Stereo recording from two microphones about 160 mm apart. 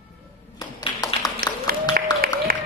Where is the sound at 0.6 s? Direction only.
25° left (ahead or behind).